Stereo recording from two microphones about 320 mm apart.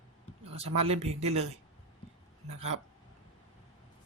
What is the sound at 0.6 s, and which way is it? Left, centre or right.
Speech, centre.